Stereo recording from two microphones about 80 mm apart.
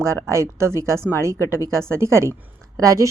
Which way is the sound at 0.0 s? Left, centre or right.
Right.